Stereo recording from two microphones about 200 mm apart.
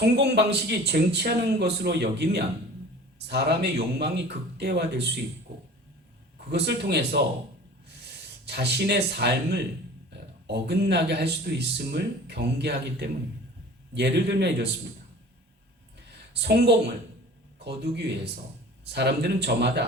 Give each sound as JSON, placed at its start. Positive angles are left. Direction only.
{"t": 0.0, "sound": "speech", "side_deg": -55}
{"t": 6.5, "sound": "speech", "side_deg": -55}
{"t": 16.0, "sound": "a sound", "side_deg": -55}
{"t": 17.6, "sound": "speech", "side_deg": -55}